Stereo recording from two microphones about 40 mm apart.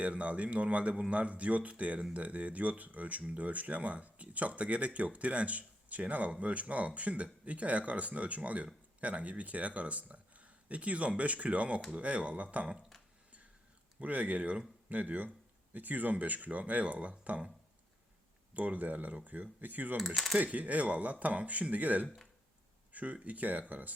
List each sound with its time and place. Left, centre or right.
0.0 s speech: right
14.0 s speech: right
14.8 s speech: right
18.5 s speech: right
20.1 s speech: centre
20.4 s speech: right
22.9 s a sound: right
23.2 s speech: right